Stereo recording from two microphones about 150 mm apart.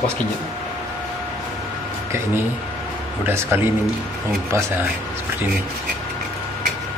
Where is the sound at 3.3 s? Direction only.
15° right (ahead or behind).